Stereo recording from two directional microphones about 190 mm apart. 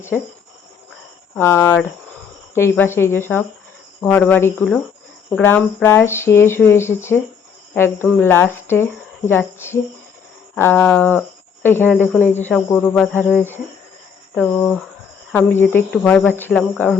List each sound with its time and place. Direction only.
1.4 s speech: 15° left (ahead or behind)
14.3 s speech: 5° left (ahead or behind)